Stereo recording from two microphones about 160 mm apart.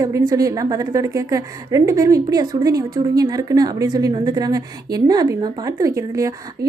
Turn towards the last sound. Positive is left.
turn(degrees=-20)  # may be behind; listen again after turning